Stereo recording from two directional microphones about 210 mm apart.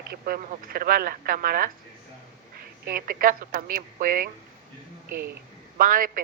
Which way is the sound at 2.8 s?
45° right (ahead or behind).